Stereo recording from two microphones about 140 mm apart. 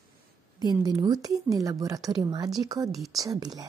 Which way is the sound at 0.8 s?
30° right (ahead or behind).